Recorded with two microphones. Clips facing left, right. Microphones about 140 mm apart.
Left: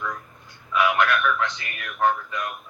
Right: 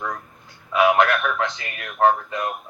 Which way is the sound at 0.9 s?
45° right (ahead or behind).